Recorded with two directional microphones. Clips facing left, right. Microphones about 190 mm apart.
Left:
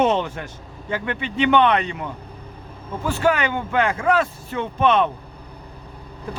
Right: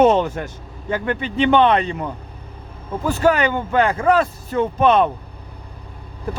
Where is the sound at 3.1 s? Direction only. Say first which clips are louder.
Right 3 dB; 40° right (ahead or behind).